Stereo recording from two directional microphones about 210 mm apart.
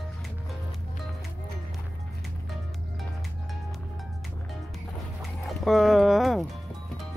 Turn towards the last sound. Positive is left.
turn(degrees=0)  # may be behind; listen again after turning